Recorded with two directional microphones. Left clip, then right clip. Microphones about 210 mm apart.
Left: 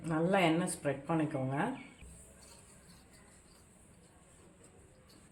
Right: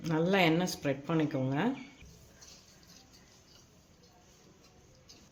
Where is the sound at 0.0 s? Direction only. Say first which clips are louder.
Right 2 dB; 45° right (ahead or behind).